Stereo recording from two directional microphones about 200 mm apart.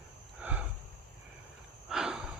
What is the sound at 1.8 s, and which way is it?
Snort, centre (ahead or behind).